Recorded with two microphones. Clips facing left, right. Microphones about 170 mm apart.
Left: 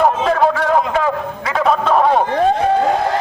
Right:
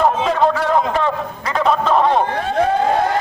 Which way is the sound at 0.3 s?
Centre (ahead or behind).